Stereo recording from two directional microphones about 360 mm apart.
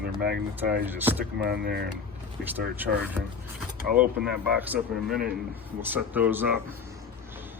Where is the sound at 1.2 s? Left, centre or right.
Right.